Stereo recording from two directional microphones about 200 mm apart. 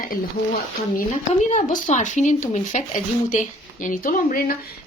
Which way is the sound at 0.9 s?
40° left (ahead or behind).